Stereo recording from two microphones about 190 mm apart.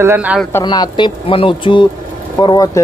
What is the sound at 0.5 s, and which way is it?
Speech, 20° left (ahead or behind).